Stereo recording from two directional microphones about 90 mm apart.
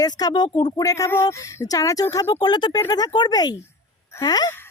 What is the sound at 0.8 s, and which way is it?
Speech, 40° left (ahead or behind).